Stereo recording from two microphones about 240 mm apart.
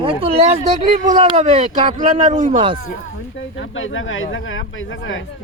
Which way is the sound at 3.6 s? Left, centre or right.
Left.